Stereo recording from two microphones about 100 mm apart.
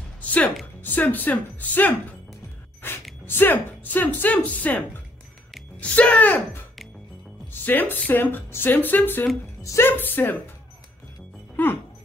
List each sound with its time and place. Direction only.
0.2 s music: 15° left (ahead or behind)
0.8 s speech: 20° left (ahead or behind)
2.8 s gasp: 20° left (ahead or behind)
3.3 s speech: 20° left (ahead or behind)
7.6 s speech: 20° left (ahead or behind)
9.6 s a sound: 30° left (ahead or behind)
9.8 s speech: 20° left (ahead or behind)
11.5 s music: 20° left (ahead or behind)